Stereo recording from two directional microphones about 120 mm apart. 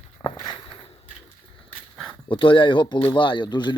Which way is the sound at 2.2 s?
45° left (ahead or behind).